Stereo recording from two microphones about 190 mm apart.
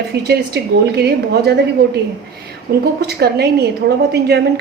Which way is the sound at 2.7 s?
50° right (ahead or behind).